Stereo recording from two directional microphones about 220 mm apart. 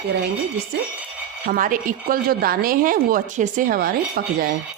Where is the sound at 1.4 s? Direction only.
40° right (ahead or behind).